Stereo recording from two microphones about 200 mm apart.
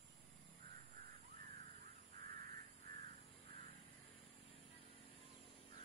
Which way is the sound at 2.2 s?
45° right (ahead or behind).